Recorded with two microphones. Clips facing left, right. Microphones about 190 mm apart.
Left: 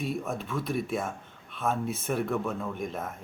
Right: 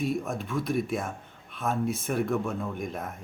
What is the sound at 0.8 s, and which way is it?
Speech, centre (ahead or behind).